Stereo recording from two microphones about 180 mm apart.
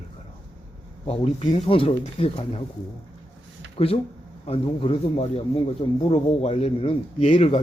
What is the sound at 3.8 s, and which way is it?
A man's voice, 30° left (ahead or behind).